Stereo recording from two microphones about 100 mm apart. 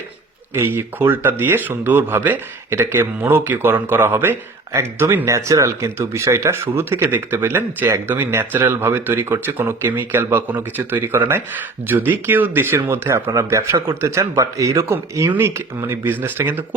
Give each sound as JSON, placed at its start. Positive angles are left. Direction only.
{"t": 0.5, "sound": "speech", "side_deg": -25}